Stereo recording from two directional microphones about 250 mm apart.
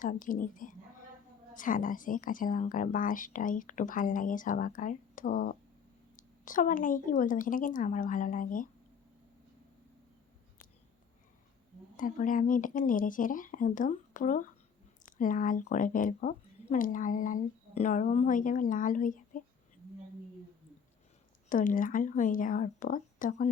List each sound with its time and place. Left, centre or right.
0.0 s speech: left
11.9 s speech: left
21.5 s speech: left